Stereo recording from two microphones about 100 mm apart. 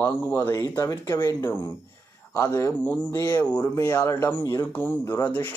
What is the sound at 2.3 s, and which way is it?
Speech, 30° left (ahead or behind).